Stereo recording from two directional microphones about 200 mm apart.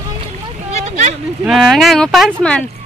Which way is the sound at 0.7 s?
35° right (ahead or behind).